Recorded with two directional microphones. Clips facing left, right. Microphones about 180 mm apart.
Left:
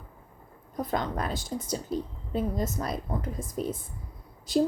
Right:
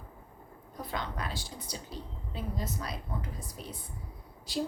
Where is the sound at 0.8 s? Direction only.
45° left (ahead or behind).